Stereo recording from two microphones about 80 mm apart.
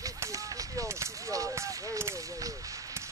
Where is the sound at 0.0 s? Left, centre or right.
Right.